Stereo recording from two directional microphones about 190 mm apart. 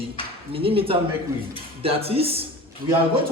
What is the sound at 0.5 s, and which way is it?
A man's voice, 30° right (ahead or behind).